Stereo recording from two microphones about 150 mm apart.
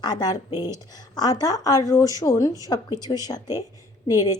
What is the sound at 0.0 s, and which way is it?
A woman's voice, 25° left (ahead or behind).